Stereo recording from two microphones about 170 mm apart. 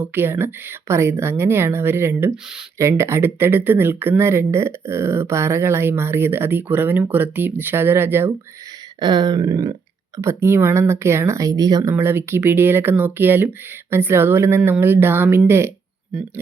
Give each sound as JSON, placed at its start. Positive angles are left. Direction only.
{"t": 0.0, "sound": "speech", "side_deg": -10}
{"t": 9.0, "sound": "a sound", "side_deg": -25}
{"t": 10.2, "sound": "speech", "side_deg": -15}